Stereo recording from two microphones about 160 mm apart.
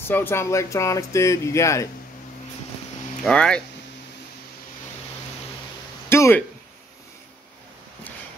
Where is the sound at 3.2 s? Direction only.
5° left (ahead or behind).